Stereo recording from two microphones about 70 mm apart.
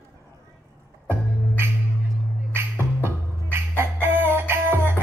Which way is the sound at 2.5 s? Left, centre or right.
Right.